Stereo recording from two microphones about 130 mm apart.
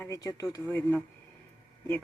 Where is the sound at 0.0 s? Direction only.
25° left (ahead or behind).